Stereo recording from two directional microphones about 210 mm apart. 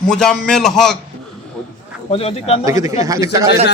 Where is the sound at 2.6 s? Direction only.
15° right (ahead or behind).